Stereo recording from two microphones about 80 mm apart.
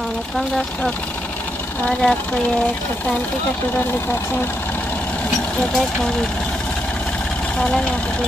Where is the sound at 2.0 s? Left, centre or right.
Centre.